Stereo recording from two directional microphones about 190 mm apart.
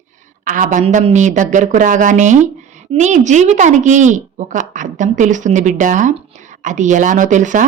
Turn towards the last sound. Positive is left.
turn(degrees=-40)  # may be behind; listen again after turning